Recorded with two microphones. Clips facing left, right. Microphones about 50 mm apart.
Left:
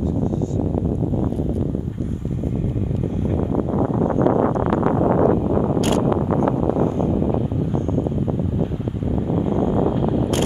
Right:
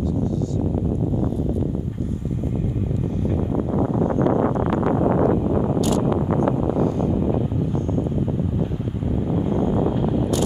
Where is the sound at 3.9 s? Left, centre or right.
Left.